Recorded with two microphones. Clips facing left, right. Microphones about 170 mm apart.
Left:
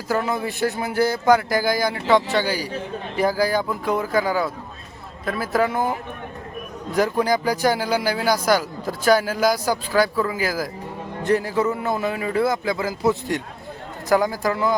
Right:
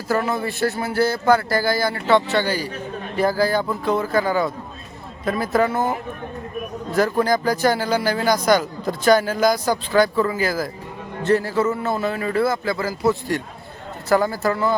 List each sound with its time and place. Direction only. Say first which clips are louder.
0.3 s speech: right 1 dB; 15° left (ahead or behind)
6.9 s speech: right 1 dB; 15° left (ahead or behind)